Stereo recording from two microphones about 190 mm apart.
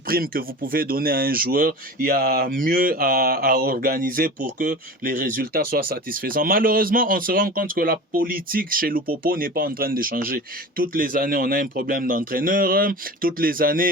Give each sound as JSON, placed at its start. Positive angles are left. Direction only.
{"t": 0.1, "sound": "speech", "side_deg": -50}